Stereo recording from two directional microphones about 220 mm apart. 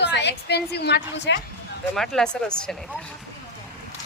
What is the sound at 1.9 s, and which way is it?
Speech, centre (ahead or behind).